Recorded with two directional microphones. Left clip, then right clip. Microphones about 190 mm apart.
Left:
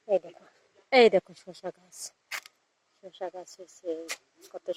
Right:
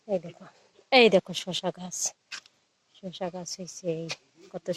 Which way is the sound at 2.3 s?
50° left (ahead or behind).